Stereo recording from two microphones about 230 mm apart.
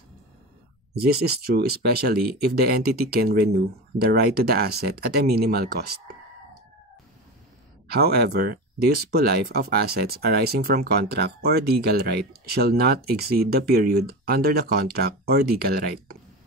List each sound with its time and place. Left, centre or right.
1.0 s speech: right
7.9 s speech: right